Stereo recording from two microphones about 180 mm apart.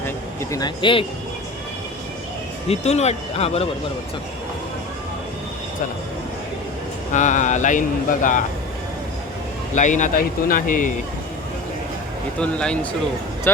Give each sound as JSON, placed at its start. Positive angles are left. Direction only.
{"t": 0.5, "sound": "speech", "side_deg": 25}
{"t": 2.6, "sound": "speech", "side_deg": 35}
{"t": 7.1, "sound": "speech", "side_deg": 45}
{"t": 9.7, "sound": "speech", "side_deg": 45}
{"t": 12.4, "sound": "speech", "side_deg": 5}